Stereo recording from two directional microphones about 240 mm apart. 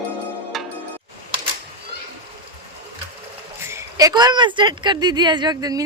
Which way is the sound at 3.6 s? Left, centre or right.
Centre.